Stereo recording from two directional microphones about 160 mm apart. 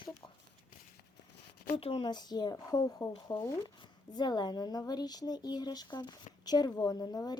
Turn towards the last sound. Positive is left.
turn(degrees=25)  # may be behind; listen again after turning